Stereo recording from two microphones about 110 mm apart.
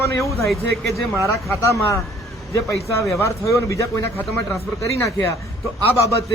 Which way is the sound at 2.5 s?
30° left (ahead or behind).